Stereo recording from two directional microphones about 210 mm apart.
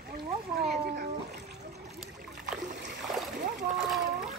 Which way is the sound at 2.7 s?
55° right (ahead or behind).